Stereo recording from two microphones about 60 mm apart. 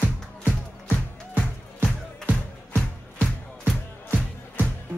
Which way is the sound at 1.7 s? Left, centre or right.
Right.